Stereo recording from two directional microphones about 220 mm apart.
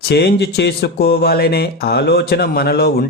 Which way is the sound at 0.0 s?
45° left (ahead or behind).